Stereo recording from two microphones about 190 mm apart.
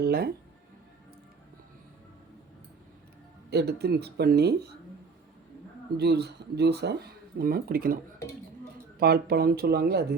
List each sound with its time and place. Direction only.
0.0 s speech: 55° right (ahead or behind)
3.5 s speech: 60° right (ahead or behind)
6.0 s speech: 60° right (ahead or behind)
9.0 s speech: 50° right (ahead or behind)